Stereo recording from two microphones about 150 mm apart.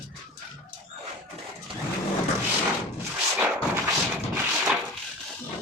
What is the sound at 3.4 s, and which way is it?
Artillery fire, 10° right (ahead or behind).